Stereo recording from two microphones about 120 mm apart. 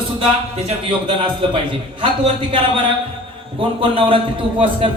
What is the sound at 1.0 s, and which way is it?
Speech, 45° right (ahead or behind).